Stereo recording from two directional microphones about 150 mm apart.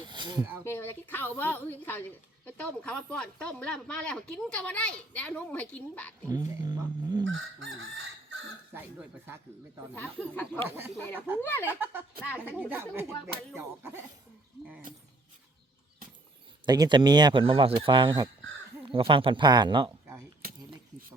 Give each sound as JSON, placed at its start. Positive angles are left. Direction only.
{"t": 0.0, "sound": "a sound", "side_deg": -30}
{"t": 0.6, "sound": "speech", "side_deg": 15}
{"t": 6.2, "sound": "speech", "side_deg": -25}
{"t": 8.7, "sound": "speech", "side_deg": -15}
{"t": 9.9, "sound": "speech", "side_deg": 10}
{"t": 10.7, "sound": "speech", "side_deg": -15}
{"t": 11.3, "sound": "speech", "side_deg": 15}
{"t": 11.7, "sound": "speech", "side_deg": -15}
{"t": 16.6, "sound": "speech", "side_deg": -25}
{"t": 20.4, "sound": "keys jangling", "side_deg": -90}